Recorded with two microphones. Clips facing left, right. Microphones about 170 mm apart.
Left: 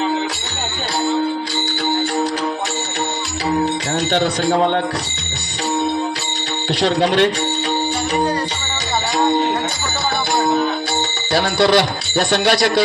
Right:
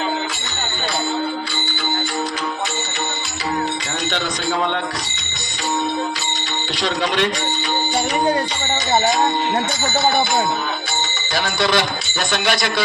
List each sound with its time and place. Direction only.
6.8 s a man's voice: 35° left (ahead or behind)
11.7 s a man's voice: 35° left (ahead or behind)